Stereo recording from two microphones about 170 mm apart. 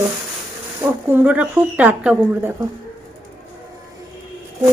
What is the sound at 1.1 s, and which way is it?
A woman's voice, 10° right (ahead or behind).